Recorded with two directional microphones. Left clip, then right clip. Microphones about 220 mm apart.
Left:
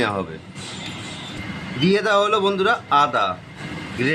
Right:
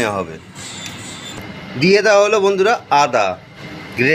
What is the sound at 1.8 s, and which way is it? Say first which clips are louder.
Speech: right 6 dB; 15° right (ahead or behind).